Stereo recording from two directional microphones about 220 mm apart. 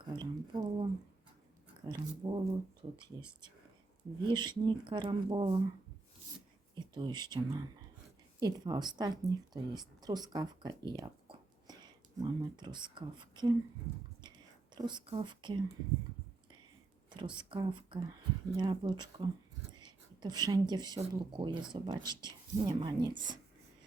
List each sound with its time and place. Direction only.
0.0 s speech: 20° right (ahead or behind)
6.7 s speech: 20° right (ahead or behind)
14.8 s speech: 20° right (ahead or behind)
17.2 s speech: 20° right (ahead or behind)